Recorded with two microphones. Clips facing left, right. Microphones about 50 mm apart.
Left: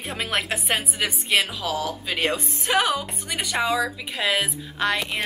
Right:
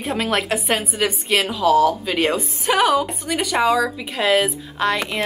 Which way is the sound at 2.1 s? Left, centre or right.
Centre.